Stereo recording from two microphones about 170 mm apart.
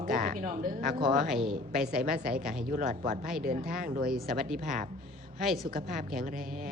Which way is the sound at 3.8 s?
60° right (ahead or behind).